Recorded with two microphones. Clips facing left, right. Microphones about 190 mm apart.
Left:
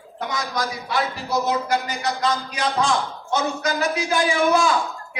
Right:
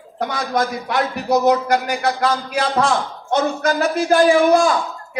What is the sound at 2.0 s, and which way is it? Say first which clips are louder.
A man's voice: right 4 dB; 60° right (ahead or behind).